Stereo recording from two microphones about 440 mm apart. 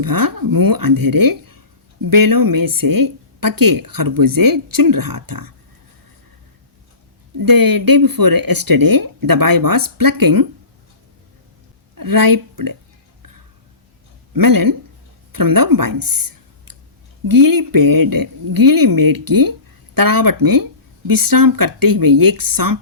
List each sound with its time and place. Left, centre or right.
0.0 s speech: right
7.3 s speech: right
11.9 s speech: right
14.3 s speech: right